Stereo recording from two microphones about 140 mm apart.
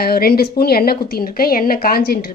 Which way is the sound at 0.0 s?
90° left.